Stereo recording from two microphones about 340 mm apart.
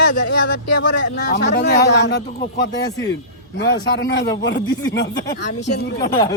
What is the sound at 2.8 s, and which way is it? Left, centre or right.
Speech, centre.